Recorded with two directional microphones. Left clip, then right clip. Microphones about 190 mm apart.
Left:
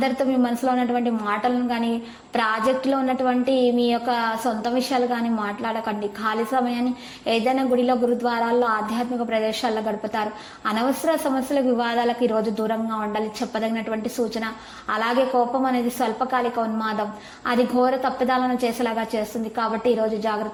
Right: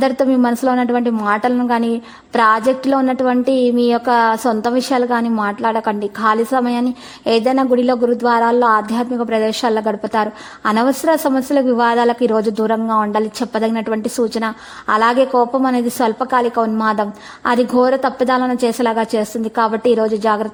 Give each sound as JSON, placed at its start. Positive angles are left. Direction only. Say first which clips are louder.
{"t": 0.0, "sound": "a woman's voice", "louder": "right 7 dB", "side_deg": -45}